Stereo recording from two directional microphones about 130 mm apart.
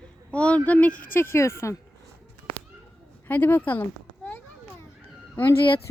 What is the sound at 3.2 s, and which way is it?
Speech, 15° left (ahead or behind).